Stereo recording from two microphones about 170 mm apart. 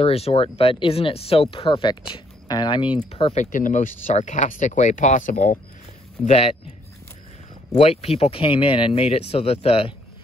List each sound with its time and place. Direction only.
0.0 s speech: 35° left (ahead or behind)
3.3 s speech: 50° left (ahead or behind)
6.2 s speech: 35° left (ahead or behind)
7.7 s speech: 35° left (ahead or behind)